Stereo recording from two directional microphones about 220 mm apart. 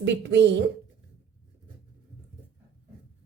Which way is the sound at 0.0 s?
55° right (ahead or behind).